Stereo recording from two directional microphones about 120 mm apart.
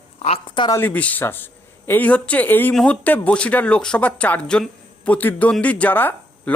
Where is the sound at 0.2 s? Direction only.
55° left (ahead or behind).